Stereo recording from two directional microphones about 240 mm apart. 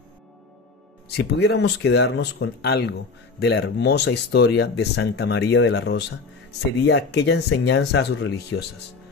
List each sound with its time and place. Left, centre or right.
1.0 s speech: left